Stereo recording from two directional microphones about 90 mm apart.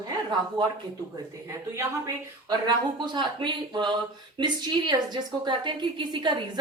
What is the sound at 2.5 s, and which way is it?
A woman's voice, 55° right (ahead or behind).